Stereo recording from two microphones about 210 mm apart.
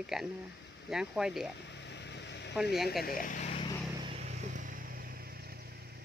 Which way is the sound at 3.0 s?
40° left (ahead or behind).